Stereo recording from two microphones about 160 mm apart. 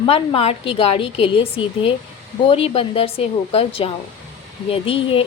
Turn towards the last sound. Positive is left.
turn(degrees=35)  # may be behind; listen again after turning